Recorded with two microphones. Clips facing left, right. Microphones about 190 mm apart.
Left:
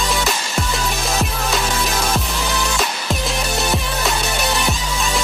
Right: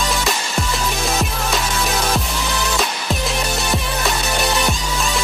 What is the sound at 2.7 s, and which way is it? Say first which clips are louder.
Music: even; centre (ahead or behind).